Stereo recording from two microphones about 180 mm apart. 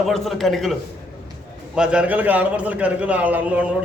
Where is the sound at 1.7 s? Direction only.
5° right (ahead or behind).